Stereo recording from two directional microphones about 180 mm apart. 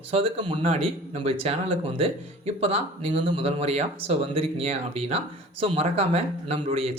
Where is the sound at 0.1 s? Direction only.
30° right (ahead or behind).